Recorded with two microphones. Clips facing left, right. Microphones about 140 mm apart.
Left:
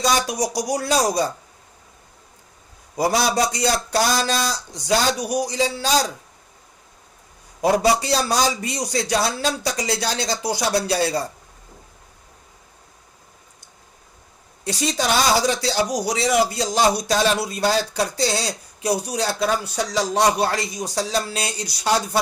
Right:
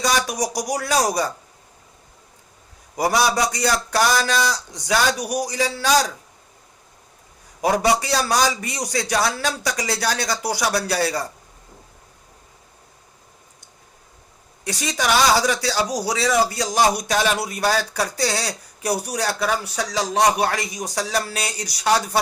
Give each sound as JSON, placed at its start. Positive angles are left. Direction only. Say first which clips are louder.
{"t": 0.0, "sound": "speech", "louder": "left 1 dB", "side_deg": 25}
{"t": 3.0, "sound": "speech", "louder": "even", "side_deg": 30}
{"t": 7.8, "sound": "speech", "louder": "left 1 dB", "side_deg": 25}
{"t": 14.6, "sound": "speech", "louder": "left 2 dB", "side_deg": 30}